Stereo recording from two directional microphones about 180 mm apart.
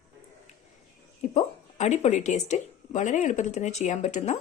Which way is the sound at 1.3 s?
40° left (ahead or behind).